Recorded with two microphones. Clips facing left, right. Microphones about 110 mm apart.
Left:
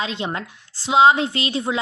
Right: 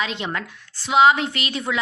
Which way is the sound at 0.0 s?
30° left (ahead or behind).